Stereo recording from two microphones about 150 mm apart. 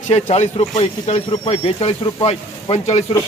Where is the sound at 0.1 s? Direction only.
50° left (ahead or behind).